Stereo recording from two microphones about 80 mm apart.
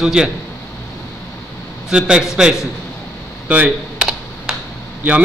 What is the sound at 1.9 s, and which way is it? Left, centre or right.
Speech, centre.